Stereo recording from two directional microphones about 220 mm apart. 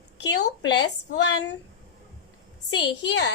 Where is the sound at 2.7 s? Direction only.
55° left (ahead or behind).